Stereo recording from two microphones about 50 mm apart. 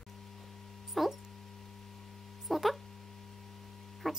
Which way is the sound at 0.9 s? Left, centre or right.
Centre.